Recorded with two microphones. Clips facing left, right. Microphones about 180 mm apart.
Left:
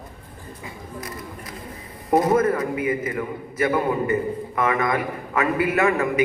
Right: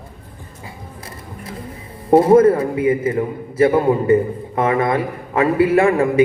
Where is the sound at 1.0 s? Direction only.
30° right (ahead or behind).